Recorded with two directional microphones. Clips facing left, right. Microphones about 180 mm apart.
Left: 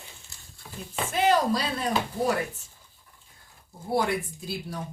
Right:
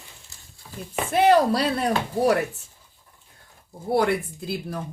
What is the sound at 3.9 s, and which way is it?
Speech, 65° right (ahead or behind).